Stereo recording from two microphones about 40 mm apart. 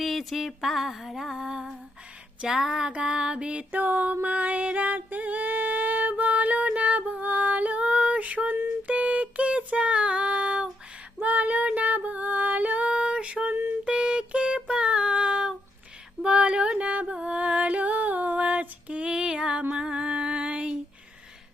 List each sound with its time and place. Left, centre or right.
0.0 s music: centre
2.5 s a sound: centre
2.9 s music: right
3.7 s music: right
8.9 s a sound: right
9.6 s child singing: right
11.2 s female singing: right
12.9 s a sound: right
13.8 s music: right